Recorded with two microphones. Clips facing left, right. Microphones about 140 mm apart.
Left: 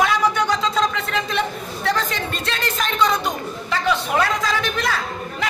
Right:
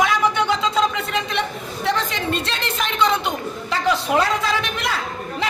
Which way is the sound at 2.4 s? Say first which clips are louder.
Left 1 dB; 25° right (ahead or behind).